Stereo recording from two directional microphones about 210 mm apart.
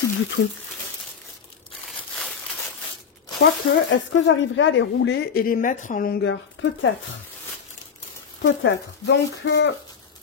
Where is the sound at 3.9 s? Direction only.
65° left (ahead or behind).